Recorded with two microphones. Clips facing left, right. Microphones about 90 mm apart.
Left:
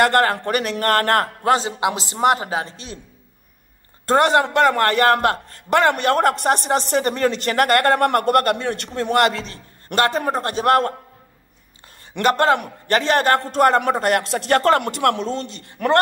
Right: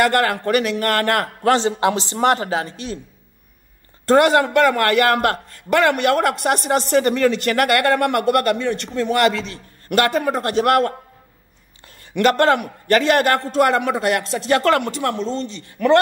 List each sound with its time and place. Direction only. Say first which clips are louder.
0.0 s speech: left 1 dB; 35° left (ahead or behind)
1.6 s a man's voice: right 4 dB; 10° left (ahead or behind)
4.0 s speech: right 2 dB; 25° left (ahead or behind)
12.1 s a man's voice: right 1 dB; 20° left (ahead or behind)
13.5 s a man's voice: left 1 dB; 40° left (ahead or behind)
14.2 s a man's voice: even; 60° left (ahead or behind)